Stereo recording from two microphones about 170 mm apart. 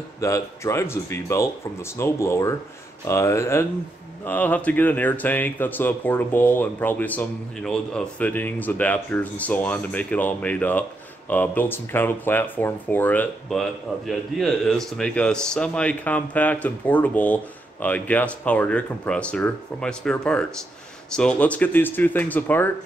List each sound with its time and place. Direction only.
0.2 s speech: 15° left (ahead or behind)